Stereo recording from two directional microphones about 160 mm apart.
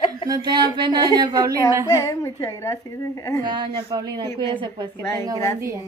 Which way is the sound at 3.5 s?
25° right (ahead or behind).